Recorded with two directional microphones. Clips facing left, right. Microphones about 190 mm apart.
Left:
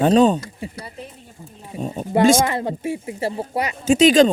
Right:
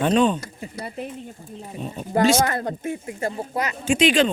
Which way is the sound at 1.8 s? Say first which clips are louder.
Left 6 dB; 40° left (ahead or behind).